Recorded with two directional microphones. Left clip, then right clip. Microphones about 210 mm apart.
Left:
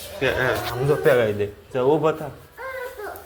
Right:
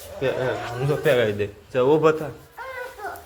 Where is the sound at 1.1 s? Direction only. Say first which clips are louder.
Left 1 dB; 15° right (ahead or behind).